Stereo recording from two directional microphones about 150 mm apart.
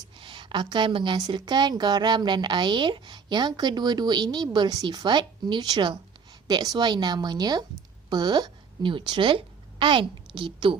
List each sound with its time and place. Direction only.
0.2 s a woman's voice: 35° right (ahead or behind)